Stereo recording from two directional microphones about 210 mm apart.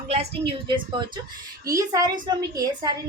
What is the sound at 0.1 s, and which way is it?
A woman's voice, 25° right (ahead or behind).